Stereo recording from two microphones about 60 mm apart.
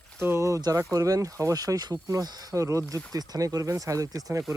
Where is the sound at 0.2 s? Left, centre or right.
Right.